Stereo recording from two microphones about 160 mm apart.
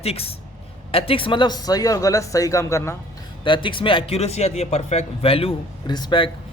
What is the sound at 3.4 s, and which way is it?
Speech, 30° left (ahead or behind).